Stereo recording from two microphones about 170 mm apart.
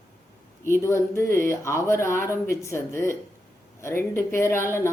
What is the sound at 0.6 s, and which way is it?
Speech, 15° left (ahead or behind).